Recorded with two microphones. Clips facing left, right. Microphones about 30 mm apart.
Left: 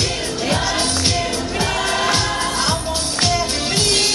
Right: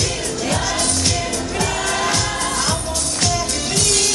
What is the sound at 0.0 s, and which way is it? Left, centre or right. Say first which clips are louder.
Music: left 1 dB; left.